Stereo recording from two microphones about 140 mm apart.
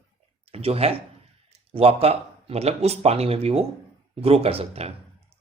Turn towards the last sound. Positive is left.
turn(degrees=-45)  # may be behind; listen again after turning